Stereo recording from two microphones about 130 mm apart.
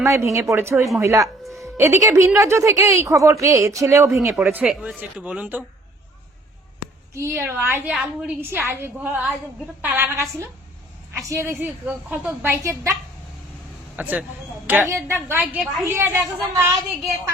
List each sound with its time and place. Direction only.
0.0 s a woman's voice: 20° right (ahead or behind)
7.1 s a woman's voice: 20° right (ahead or behind)
11.6 s a woman's voice: 10° right (ahead or behind)
13.9 s a woman's voice: 10° right (ahead or behind)